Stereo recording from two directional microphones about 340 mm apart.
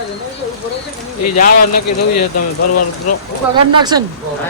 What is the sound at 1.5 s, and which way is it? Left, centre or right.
Speech, left.